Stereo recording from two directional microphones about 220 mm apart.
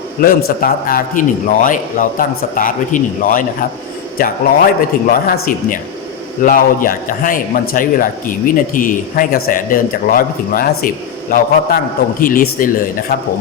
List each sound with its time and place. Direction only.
0.2 s a man's voice: 40° left (ahead or behind)